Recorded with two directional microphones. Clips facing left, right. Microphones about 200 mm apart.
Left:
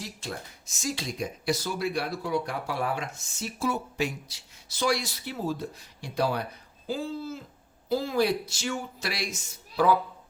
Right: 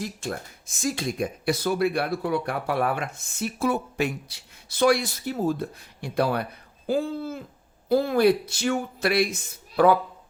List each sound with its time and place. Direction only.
0.0 s speech: 55° right (ahead or behind)